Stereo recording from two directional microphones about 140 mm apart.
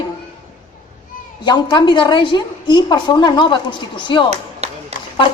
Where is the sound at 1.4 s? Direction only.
30° left (ahead or behind).